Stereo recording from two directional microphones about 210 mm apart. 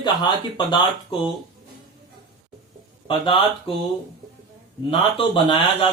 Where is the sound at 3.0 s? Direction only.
25° left (ahead or behind).